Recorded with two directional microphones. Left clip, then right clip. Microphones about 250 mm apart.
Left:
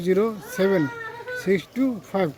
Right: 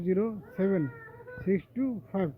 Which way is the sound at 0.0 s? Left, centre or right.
Centre.